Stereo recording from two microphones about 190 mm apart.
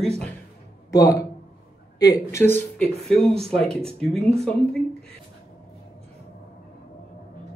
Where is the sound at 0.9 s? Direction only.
20° left (ahead or behind).